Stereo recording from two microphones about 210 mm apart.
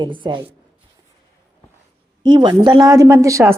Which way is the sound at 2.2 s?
20° right (ahead or behind).